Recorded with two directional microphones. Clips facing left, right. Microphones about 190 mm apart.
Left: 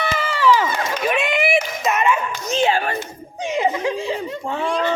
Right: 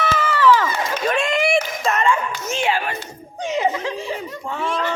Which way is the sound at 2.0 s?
20° left (ahead or behind).